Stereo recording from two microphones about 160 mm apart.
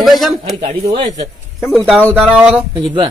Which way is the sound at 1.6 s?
Centre (ahead or behind).